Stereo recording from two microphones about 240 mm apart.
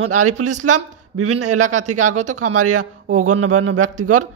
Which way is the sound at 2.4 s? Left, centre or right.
Right.